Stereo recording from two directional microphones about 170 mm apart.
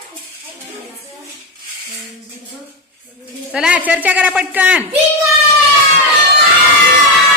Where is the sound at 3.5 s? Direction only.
5° right (ahead or behind).